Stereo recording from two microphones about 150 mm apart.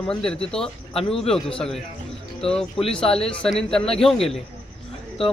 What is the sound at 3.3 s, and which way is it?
Speech, 5° left (ahead or behind).